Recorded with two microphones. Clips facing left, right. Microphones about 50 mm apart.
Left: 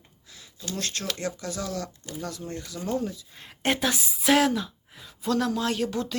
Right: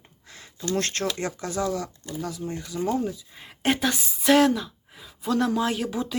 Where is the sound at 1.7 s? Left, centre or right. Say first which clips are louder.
Right 3 dB; centre.